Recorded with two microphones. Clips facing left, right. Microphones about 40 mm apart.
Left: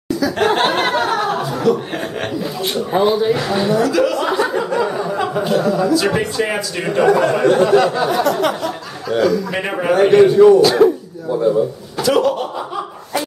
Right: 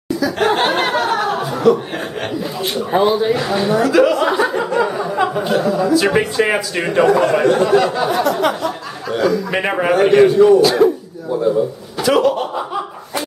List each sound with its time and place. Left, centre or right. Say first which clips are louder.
0.1 s a sound: even; centre
1.4 s chuckle: right 2 dB; centre
2.9 s speech: right 1 dB; centre
9.5 s speech: right 2 dB; centre
10.2 s speech: left 2 dB; centre
12.0 s speech: right 1 dB; centre